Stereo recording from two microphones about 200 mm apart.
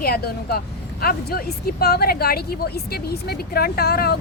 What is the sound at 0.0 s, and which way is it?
Speech, 50° left (ahead or behind).